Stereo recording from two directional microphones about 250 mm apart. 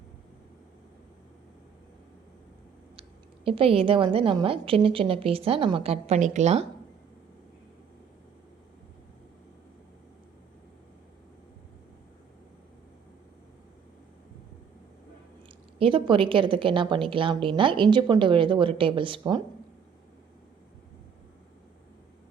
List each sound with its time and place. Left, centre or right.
3.4 s a woman's voice: right
15.8 s a woman's voice: centre